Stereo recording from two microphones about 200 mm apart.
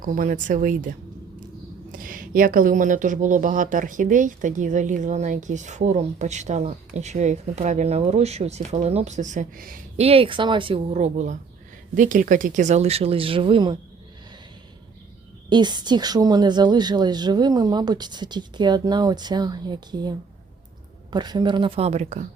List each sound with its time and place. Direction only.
0.0 s speech: 40° right (ahead or behind)
1.9 s speech: 45° right (ahead or behind)
10.0 s a woman's voice: 30° right (ahead or behind)
15.4 s a woman's voice: 20° right (ahead or behind)